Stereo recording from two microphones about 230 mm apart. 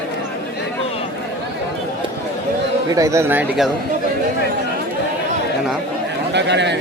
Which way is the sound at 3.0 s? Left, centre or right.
Centre.